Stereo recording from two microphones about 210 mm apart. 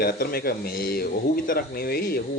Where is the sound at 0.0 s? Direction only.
45° left (ahead or behind).